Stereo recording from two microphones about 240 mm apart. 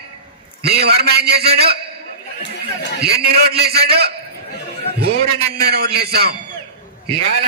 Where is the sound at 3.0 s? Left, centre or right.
Right.